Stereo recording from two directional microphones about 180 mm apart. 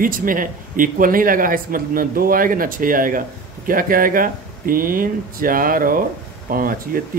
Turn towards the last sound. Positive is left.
turn(degrees=-50)  # may be behind; listen again after turning